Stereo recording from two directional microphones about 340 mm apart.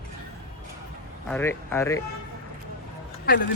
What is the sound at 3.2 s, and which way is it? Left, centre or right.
Speech, left.